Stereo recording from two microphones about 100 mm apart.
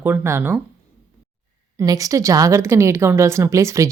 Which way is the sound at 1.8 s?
35° right (ahead or behind).